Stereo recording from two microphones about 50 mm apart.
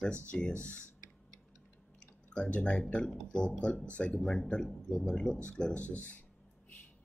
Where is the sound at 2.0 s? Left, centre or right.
Left.